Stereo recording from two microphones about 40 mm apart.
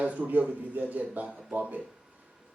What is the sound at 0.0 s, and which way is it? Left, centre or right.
Speech, right.